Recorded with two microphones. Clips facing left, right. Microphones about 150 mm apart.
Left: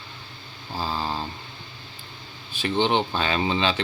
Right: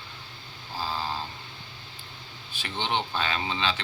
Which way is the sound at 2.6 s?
20° left (ahead or behind).